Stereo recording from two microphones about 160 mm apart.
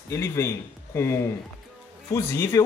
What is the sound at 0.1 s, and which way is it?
Speech, 15° left (ahead or behind).